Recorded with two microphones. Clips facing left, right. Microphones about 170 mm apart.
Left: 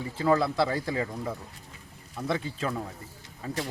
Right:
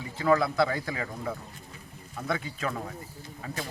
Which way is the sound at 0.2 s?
30° left (ahead or behind).